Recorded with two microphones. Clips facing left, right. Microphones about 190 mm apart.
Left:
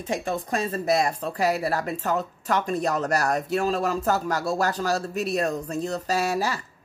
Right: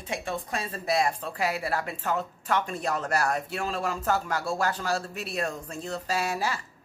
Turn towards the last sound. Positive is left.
turn(degrees=40)  # may be behind; listen again after turning